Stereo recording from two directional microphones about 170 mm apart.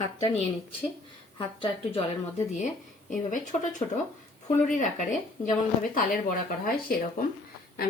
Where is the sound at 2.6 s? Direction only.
45° left (ahead or behind).